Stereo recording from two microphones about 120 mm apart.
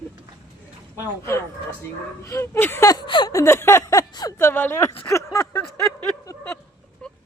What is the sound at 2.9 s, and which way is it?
Speech, 40° left (ahead or behind).